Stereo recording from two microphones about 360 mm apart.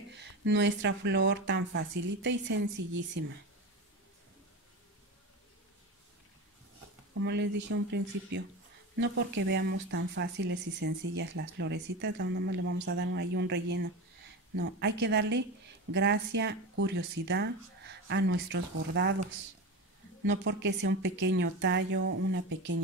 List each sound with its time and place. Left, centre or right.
0.1 s speech: right
7.2 s speech: right
20.2 s speech: right